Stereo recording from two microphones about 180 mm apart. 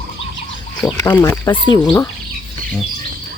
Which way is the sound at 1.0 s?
20° left (ahead or behind).